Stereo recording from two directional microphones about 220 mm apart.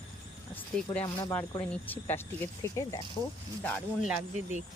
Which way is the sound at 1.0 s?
10° left (ahead or behind).